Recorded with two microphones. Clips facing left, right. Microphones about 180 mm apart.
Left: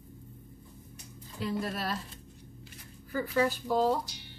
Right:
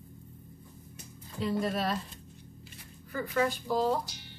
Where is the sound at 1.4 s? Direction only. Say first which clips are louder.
Right 3 dB; centre (ahead or behind).